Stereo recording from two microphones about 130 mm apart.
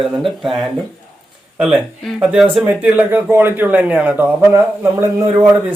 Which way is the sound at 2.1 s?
5° right (ahead or behind).